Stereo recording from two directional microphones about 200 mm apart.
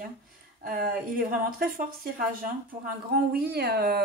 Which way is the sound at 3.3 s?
50° right (ahead or behind).